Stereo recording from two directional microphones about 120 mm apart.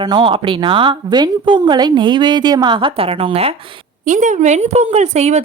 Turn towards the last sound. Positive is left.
turn(degrees=-65)  # may be behind; listen again after turning